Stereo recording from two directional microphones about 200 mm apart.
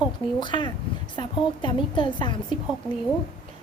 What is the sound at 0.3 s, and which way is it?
A child's voice, 25° left (ahead or behind).